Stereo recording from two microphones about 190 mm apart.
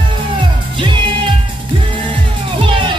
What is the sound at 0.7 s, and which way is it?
Music, 25° right (ahead or behind).